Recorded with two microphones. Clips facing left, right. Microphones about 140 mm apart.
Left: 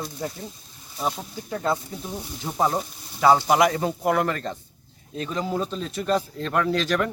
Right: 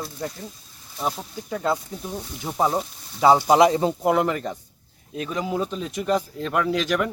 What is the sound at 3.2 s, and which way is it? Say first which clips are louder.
Speech: right 2 dB; 15° right (ahead or behind).